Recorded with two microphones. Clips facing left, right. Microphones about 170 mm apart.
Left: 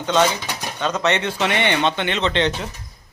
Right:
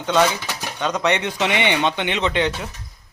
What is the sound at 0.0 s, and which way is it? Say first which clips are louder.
Speech: even; 10° right (ahead or behind).